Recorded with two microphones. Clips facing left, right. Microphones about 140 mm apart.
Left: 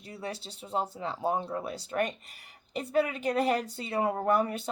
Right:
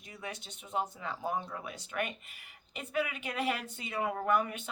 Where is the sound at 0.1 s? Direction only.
35° left (ahead or behind).